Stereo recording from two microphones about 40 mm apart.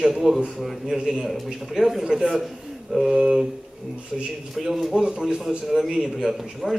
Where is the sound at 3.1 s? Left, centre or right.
Centre.